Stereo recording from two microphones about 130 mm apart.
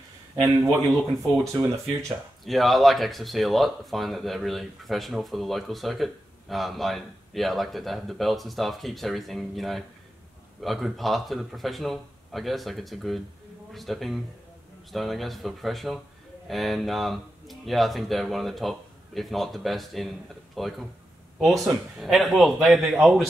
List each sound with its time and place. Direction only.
1.4 s speech: 25° right (ahead or behind)
2.4 s speech: centre (ahead or behind)